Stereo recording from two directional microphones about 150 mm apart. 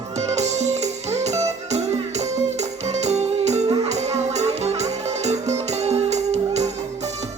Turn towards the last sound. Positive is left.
turn(degrees=-50)  # may be behind; listen again after turning